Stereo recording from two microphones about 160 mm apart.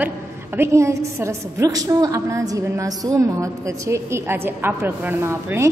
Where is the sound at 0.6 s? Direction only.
20° right (ahead or behind).